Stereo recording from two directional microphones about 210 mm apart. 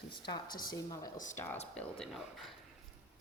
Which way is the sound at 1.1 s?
35° left (ahead or behind).